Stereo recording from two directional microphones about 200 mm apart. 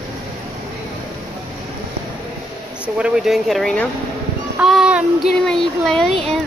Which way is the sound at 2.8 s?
5° right (ahead or behind).